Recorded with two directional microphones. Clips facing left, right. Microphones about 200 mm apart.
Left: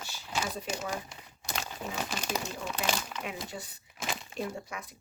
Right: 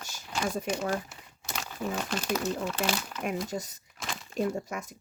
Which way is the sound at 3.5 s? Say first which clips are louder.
Right 7 dB; 40° right (ahead or behind).